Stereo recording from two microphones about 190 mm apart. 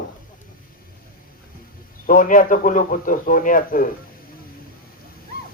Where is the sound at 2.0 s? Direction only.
45° left (ahead or behind).